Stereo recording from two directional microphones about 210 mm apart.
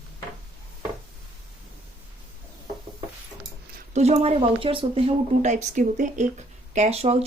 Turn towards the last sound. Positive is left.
turn(degrees=-30)  # may be behind; listen again after turning